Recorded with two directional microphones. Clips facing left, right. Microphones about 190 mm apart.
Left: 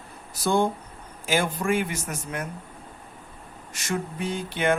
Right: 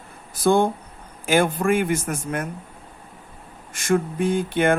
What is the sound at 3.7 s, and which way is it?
Speech, 50° right (ahead or behind).